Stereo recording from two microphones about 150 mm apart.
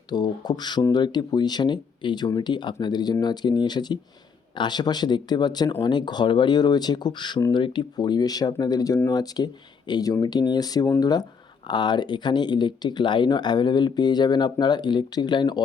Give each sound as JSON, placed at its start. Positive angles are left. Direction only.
{"t": 0.1, "sound": "speech", "side_deg": 30}